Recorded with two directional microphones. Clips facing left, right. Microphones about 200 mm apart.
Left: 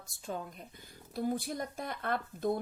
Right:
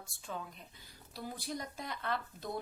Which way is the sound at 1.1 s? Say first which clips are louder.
Left 8 dB; 50° left (ahead or behind).